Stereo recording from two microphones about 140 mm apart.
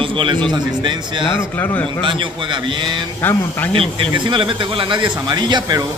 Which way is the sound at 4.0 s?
35° right (ahead or behind).